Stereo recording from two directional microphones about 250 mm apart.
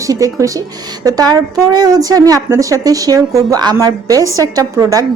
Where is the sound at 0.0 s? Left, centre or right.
Centre.